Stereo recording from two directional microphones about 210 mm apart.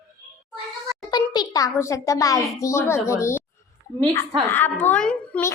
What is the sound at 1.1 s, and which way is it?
A child's voice, 20° left (ahead or behind).